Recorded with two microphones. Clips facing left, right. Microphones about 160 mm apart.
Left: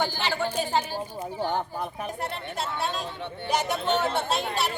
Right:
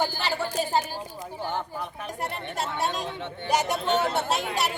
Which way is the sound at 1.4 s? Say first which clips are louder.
Left 3 dB; 15° left (ahead or behind).